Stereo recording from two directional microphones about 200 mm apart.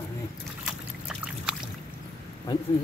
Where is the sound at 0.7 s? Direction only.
5° right (ahead or behind).